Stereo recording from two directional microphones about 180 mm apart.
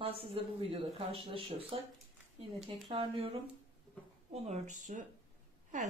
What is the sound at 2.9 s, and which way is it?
Speech, 30° right (ahead or behind).